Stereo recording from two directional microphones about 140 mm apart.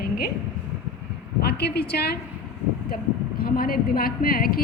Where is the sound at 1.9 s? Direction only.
90° left.